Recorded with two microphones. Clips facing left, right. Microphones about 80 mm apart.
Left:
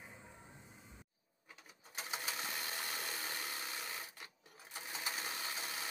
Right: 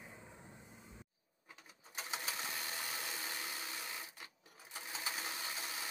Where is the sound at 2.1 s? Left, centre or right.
Centre.